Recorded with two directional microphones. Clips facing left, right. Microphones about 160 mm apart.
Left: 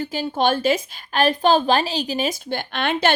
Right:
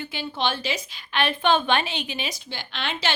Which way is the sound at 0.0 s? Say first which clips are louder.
Left 7 dB; 40° left (ahead or behind).